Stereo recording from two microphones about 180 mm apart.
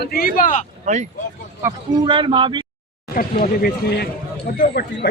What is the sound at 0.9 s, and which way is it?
Speech, 40° right (ahead or behind).